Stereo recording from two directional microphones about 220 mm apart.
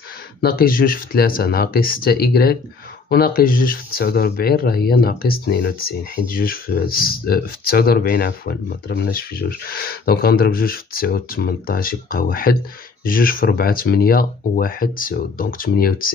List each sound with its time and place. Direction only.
0.4 s speech: 40° left (ahead or behind)